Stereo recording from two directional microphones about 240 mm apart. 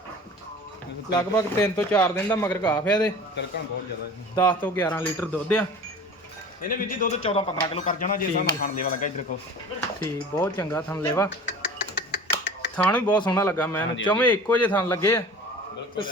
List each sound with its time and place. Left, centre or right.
1.2 s speech: centre
4.4 s speech: centre
6.6 s a man's voice: left; by 7.9 s centre
7.9 s speech: left
10.0 s speech: centre
11.4 s finger snapping: left
12.7 s speech: centre